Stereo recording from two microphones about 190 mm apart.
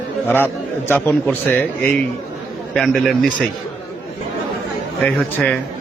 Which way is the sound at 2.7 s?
5° left (ahead or behind).